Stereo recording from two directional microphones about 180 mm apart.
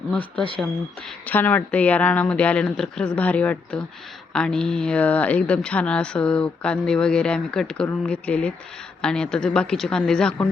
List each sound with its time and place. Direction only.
0.1 s speech: 5° left (ahead or behind)